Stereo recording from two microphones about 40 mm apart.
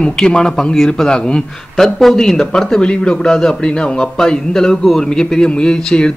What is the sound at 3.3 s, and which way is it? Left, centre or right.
A man's voice, centre.